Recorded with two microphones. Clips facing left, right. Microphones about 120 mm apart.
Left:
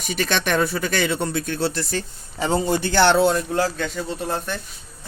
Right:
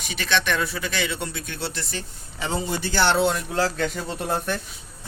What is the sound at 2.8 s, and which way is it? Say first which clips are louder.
Speech: left 4 dB; 55° left (ahead or behind).